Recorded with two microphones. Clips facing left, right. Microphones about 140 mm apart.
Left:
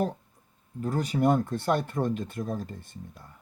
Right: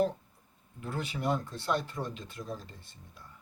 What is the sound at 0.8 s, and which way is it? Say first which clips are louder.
Speech: left 10 dB; 40° left (ahead or behind).